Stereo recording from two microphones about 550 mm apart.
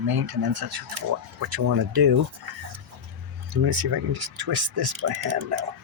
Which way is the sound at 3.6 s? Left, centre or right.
Right.